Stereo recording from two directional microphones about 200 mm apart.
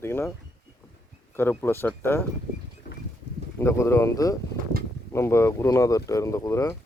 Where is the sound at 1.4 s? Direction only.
10° left (ahead or behind).